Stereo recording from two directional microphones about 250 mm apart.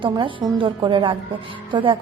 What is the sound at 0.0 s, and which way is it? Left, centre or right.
A woman's voice, centre.